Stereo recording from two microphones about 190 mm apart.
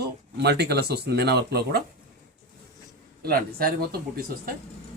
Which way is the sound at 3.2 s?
50° right (ahead or behind).